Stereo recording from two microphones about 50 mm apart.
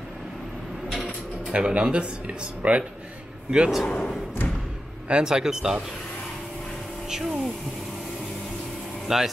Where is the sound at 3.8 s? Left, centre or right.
Left.